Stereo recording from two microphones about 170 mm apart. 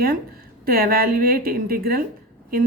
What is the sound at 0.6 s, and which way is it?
A woman's voice, 60° right (ahead or behind).